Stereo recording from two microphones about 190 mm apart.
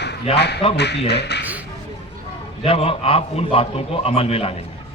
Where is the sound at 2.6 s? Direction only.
30° left (ahead or behind).